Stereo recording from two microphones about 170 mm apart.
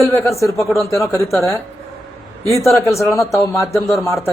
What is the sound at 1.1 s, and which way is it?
Speech, 15° left (ahead or behind).